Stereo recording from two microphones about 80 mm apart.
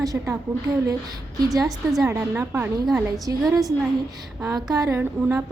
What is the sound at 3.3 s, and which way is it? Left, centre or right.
Speech, right.